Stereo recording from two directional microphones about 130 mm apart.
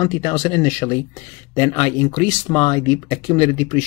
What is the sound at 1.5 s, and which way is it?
Speech, 30° left (ahead or behind).